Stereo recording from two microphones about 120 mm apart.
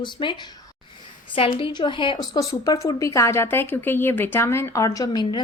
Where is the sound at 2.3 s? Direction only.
30° left (ahead or behind).